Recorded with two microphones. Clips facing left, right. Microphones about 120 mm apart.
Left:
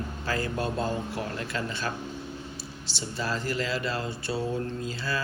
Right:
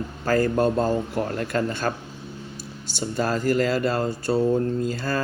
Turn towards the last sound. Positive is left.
turn(degrees=-45)  # may be behind; listen again after turning